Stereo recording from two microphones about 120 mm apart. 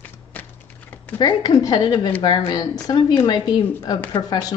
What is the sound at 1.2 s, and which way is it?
A woman's voice, 35° left (ahead or behind).